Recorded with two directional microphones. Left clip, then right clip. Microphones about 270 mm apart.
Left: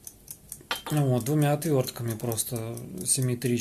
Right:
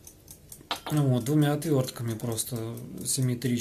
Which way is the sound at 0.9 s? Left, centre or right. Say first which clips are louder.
Even; centre.